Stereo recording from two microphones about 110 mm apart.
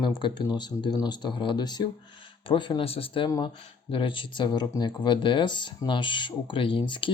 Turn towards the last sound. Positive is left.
turn(degrees=45)  # may be behind; listen again after turning